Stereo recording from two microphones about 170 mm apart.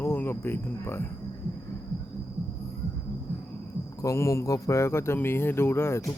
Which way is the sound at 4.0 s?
20° left (ahead or behind).